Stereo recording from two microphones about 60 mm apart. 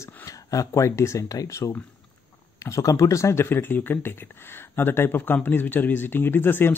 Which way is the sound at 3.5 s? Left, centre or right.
Left.